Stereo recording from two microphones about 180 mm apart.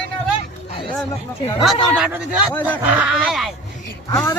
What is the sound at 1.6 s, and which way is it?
Speech, centre (ahead or behind).